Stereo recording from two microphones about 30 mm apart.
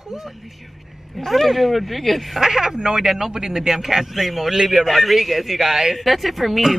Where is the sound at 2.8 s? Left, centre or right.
Right.